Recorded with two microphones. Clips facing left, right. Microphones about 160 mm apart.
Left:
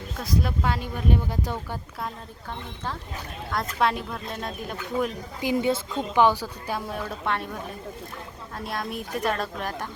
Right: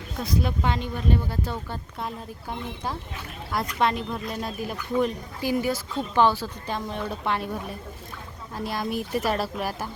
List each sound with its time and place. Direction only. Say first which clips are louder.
0.2 s speech: right 1 dB; centre (ahead or behind)
2.5 s speech: right 2 dB; 10° right (ahead or behind)
3.8 s speech: even; centre (ahead or behind)
5.4 s speech: left 2 dB; 20° left (ahead or behind)
6.0 s speech: even; 15° left (ahead or behind); by 9.9 s 5° right (ahead or behind)